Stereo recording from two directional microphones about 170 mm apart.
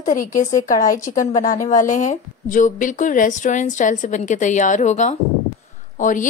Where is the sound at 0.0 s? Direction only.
50° left (ahead or behind).